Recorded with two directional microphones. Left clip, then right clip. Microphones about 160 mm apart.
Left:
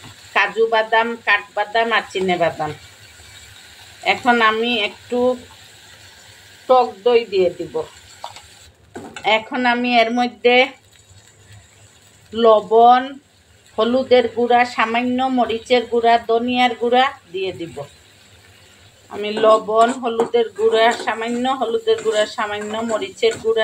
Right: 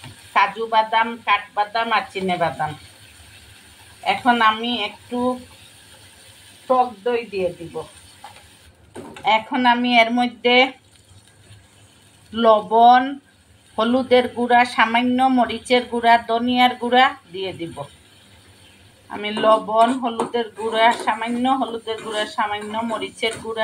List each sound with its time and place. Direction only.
0.3 s speech: 35° left (ahead or behind)
4.0 s speech: 40° left (ahead or behind)
9.2 s speech: 30° left (ahead or behind)
12.4 s a woman's voice: 10° left (ahead or behind)
19.1 s speech: 15° left (ahead or behind)